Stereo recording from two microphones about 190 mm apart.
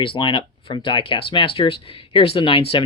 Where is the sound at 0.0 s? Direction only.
25° left (ahead or behind).